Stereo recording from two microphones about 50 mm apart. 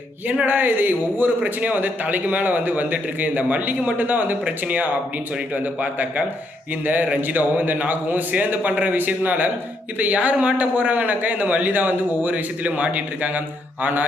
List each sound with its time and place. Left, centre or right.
0.4 s a man's voice: right